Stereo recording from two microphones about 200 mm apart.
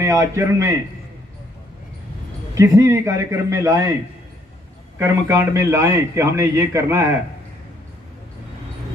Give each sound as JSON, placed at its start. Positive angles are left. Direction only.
{"t": 0.0, "sound": "a man's voice", "side_deg": -15}
{"t": 2.5, "sound": "a man's voice", "side_deg": -15}
{"t": 4.9, "sound": "a man's voice", "side_deg": -15}